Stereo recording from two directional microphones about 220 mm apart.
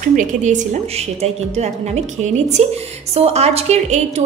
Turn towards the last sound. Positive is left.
turn(degrees=-30)  # may be behind; listen again after turning